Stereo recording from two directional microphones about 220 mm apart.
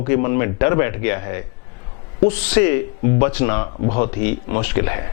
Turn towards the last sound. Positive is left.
turn(degrees=15)  # may be behind; listen again after turning